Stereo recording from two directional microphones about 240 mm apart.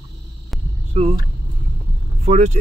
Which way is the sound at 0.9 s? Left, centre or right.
Right.